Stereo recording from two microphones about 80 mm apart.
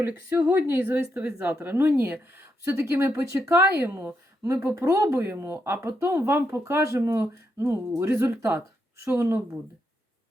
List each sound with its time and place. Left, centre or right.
0.0 s speech: right
0.9 s a woman's voice: centre
1.5 s speech: right